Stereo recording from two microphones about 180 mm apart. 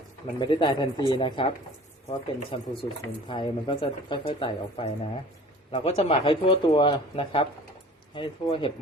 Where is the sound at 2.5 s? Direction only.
30° left (ahead or behind).